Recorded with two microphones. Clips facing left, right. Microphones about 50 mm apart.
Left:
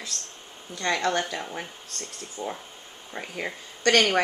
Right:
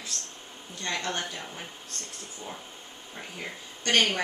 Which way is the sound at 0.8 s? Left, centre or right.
Left.